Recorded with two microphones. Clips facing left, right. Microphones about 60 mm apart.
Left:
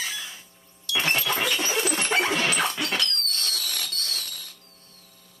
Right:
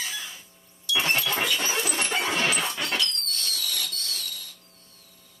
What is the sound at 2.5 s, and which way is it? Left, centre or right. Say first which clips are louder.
Dog: left 2 dB; left.